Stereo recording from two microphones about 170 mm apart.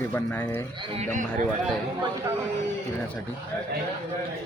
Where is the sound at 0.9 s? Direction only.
45° right (ahead or behind).